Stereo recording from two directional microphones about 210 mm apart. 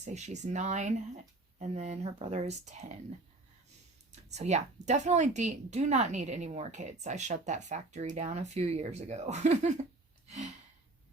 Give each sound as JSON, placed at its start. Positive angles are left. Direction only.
{"t": 0.0, "sound": "speech", "side_deg": -35}
{"t": 4.1, "sound": "speech", "side_deg": -30}
{"t": 10.2, "sound": "gasp", "side_deg": -30}